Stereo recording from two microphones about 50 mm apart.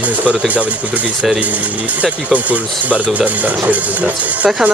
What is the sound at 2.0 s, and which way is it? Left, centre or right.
Speech, right.